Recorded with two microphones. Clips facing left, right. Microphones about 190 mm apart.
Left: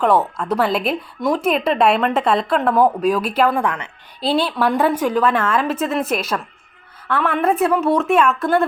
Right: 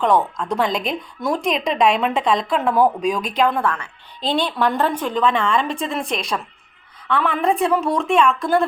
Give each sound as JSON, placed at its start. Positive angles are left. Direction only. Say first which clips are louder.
{"t": 0.0, "sound": "a woman's voice", "louder": "left 1 dB", "side_deg": 5}
{"t": 4.3, "sound": "a woman's voice", "louder": "left 2 dB", "side_deg": 5}